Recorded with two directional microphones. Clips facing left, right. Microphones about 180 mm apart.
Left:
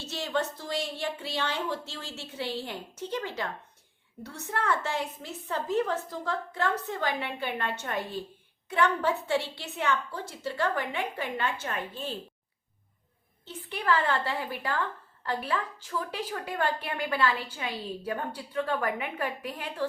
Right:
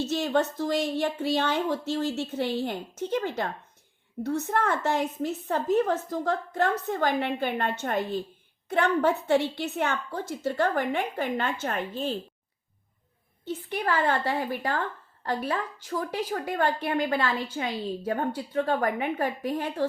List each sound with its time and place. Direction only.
0.1 s a woman's voice: 45° right (ahead or behind)
13.7 s a woman's voice: 45° right (ahead or behind)
15.9 s a woman's voice: 40° right (ahead or behind)